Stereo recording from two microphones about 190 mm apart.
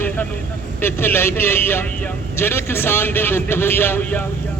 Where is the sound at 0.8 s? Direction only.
10° left (ahead or behind).